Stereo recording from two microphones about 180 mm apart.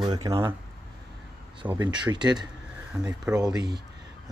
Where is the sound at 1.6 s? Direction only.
15° right (ahead or behind).